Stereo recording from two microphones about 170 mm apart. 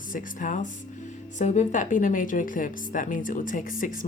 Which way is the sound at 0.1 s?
50° left (ahead or behind).